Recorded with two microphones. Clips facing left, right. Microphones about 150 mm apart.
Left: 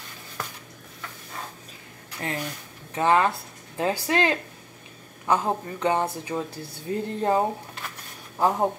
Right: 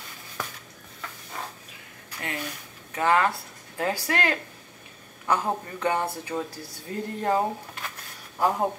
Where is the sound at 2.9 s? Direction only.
20° left (ahead or behind).